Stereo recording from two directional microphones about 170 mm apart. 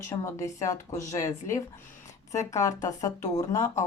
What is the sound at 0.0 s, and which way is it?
Speech, 15° left (ahead or behind).